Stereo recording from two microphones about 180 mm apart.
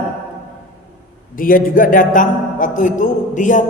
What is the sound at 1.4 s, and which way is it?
A man's voice, 50° left (ahead or behind).